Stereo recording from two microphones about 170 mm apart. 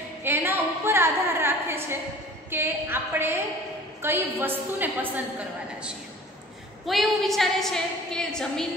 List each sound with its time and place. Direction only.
0.2 s a sound: 10° right (ahead or behind)
2.5 s a woman's voice: 15° right (ahead or behind)
6.9 s a woman's voice: centre (ahead or behind)